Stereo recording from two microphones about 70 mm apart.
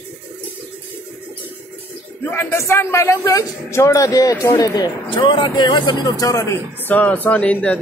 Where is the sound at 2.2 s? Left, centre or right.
Left.